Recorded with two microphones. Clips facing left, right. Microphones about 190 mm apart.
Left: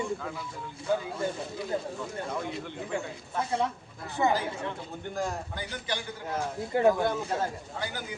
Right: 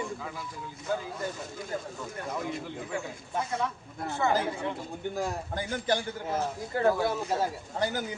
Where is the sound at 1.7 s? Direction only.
25° left (ahead or behind).